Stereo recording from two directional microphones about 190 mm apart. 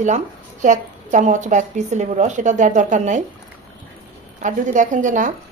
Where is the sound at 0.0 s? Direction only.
40° right (ahead or behind).